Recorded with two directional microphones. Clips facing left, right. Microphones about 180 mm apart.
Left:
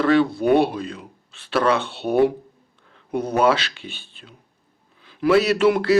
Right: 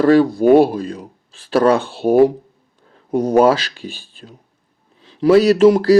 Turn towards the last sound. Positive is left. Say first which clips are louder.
# right 7 dB
turn(degrees=-35)  # may be behind; listen again after turning